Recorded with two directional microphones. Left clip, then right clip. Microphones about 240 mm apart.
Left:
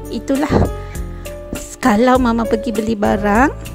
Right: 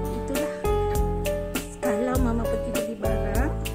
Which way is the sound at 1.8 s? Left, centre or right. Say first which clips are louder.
Left 13 dB; left.